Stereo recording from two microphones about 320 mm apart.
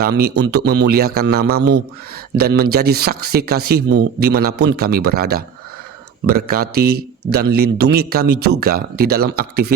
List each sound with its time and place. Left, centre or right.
0.0 s speech: right